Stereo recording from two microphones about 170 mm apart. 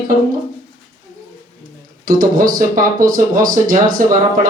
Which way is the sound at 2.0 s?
55° right (ahead or behind).